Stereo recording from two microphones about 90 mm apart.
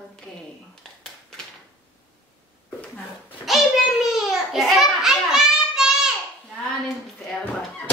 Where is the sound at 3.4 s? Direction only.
Centre (ahead or behind).